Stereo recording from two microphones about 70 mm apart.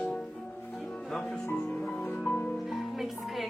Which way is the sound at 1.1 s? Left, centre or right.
Centre.